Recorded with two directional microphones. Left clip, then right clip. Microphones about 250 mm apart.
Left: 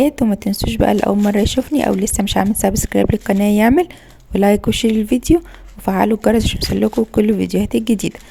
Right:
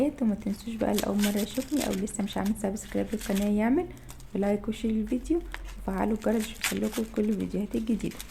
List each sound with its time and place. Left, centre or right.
0.0 s speech: left